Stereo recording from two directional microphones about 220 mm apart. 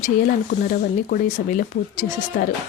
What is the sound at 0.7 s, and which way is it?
A woman's voice, 40° left (ahead or behind).